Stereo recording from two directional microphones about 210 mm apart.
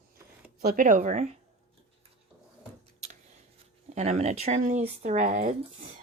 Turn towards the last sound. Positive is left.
turn(degrees=-35)  # may be behind; listen again after turning